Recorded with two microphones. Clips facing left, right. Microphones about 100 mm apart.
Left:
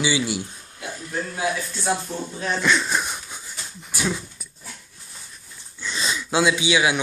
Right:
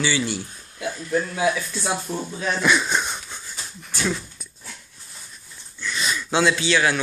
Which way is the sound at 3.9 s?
10° left (ahead or behind).